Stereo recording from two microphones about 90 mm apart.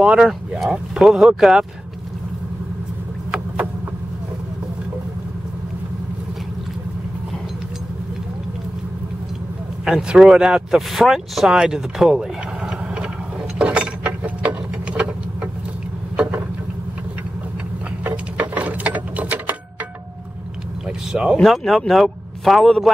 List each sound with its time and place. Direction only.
0.0 s a man's voice: 10° right (ahead or behind)
9.8 s speech: 5° right (ahead or behind)
13.6 s a sound: 15° right (ahead or behind)
18.0 s mechanisms: 15° right (ahead or behind)
21.1 s a sound: 10° right (ahead or behind)
21.4 s a man's voice: centre (ahead or behind)